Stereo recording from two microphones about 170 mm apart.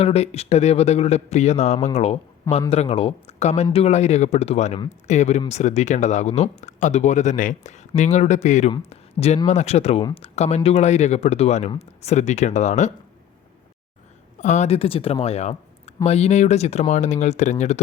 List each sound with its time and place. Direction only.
0.0 s speech: 35° left (ahead or behind)
14.4 s speech: 45° left (ahead or behind)